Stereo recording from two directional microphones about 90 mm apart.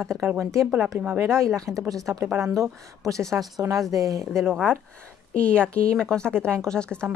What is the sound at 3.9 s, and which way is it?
Speech, 40° right (ahead or behind).